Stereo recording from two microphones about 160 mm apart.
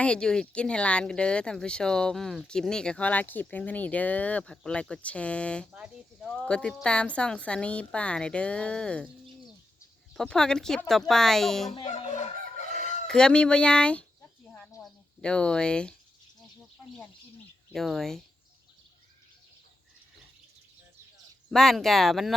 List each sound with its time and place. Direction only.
0.0 s speech: 5° left (ahead or behind)
5.7 s speech: 5° right (ahead or behind)
6.2 s speech: 5° left (ahead or behind)
10.2 s speech: 5° left (ahead or behind)
11.9 s chicken: 45° left (ahead or behind)
13.1 s speech: 5° left (ahead or behind)
17.7 s speech: centre (ahead or behind)
21.5 s speech: centre (ahead or behind)